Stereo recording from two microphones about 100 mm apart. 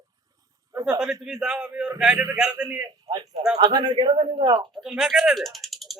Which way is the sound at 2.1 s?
30° right (ahead or behind).